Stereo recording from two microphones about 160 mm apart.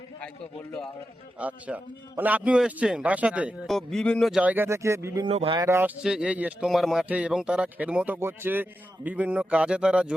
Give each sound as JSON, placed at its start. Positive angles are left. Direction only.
{"t": 1.4, "sound": "a man's voice", "side_deg": -10}
{"t": 5.2, "sound": "speech", "side_deg": -35}
{"t": 5.5, "sound": "a man's voice", "side_deg": -15}
{"t": 6.0, "sound": "a man's voice", "side_deg": -5}